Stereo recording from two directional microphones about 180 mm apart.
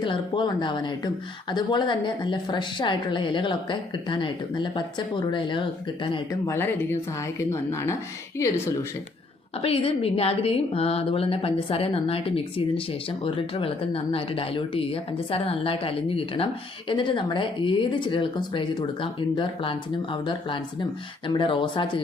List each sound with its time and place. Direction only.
0.0 s speech: 25° left (ahead or behind)
6.5 s speech: 10° left (ahead or behind)
9.6 s speech: 30° left (ahead or behind)